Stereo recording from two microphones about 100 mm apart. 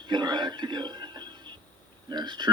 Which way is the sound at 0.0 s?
50° right (ahead or behind).